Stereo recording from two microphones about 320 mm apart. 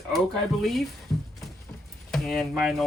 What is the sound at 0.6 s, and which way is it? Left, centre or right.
Speech, centre.